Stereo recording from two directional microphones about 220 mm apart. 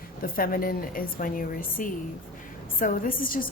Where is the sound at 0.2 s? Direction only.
40° left (ahead or behind).